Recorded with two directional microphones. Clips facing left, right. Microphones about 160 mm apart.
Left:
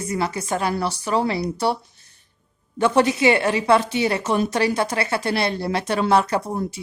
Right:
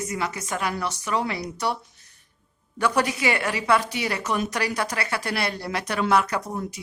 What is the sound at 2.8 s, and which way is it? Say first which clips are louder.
Speech: left 6 dB; 25° left (ahead or behind).